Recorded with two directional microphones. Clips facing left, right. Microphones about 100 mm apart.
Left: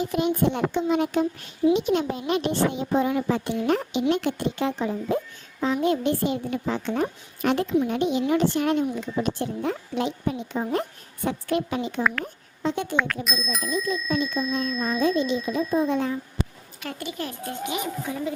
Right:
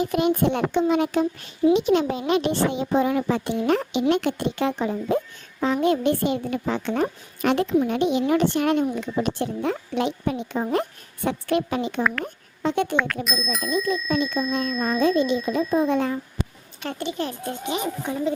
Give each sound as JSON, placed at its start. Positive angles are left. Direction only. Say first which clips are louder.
{"t": 0.0, "sound": "a child's voice", "louder": "right 2 dB", "side_deg": -60}
{"t": 4.1, "sound": "a child's voice", "louder": "right 2 dB", "side_deg": -70}
{"t": 13.2, "sound": "speech", "louder": "right 2 dB", "side_deg": 0}
{"t": 14.8, "sound": "speech", "louder": "right 3 dB", "side_deg": -50}
{"t": 16.8, "sound": "a child's voice", "louder": "right 4 dB", "side_deg": -30}